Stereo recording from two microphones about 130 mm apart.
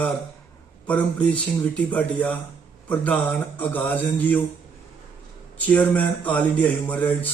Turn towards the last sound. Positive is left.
turn(degrees=10)  # may be behind; listen again after turning